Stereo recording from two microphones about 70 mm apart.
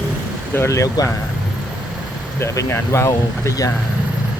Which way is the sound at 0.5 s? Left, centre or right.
Left.